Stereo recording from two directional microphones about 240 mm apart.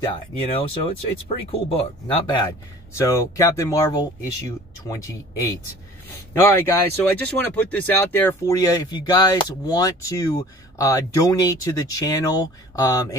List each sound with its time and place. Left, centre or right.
0.0 s speech: left